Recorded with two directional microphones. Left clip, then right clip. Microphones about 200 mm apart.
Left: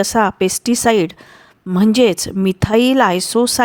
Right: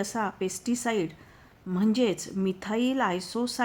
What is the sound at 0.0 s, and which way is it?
Speech, 50° left (ahead or behind).